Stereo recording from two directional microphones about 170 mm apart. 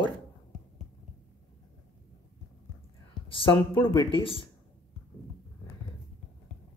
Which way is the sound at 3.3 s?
30° left (ahead or behind).